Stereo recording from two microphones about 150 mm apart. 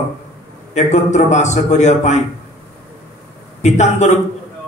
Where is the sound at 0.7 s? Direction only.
50° left (ahead or behind).